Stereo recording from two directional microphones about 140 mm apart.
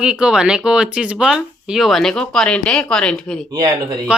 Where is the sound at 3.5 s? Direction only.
25° right (ahead or behind).